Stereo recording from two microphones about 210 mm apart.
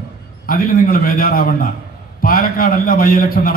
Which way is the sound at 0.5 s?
45° left (ahead or behind).